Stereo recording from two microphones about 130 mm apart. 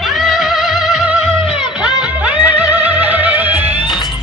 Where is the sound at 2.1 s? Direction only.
10° right (ahead or behind).